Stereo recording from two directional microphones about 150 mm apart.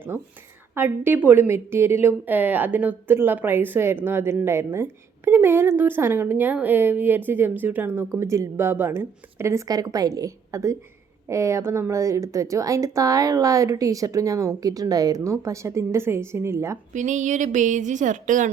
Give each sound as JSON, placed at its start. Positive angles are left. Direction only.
{"t": 0.1, "sound": "a woman's voice", "side_deg": -15}
{"t": 16.9, "sound": "speech", "side_deg": -55}